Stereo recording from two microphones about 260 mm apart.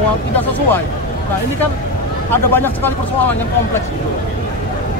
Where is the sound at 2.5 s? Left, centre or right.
Centre.